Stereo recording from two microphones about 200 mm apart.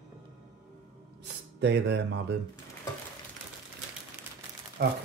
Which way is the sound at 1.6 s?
60° right (ahead or behind).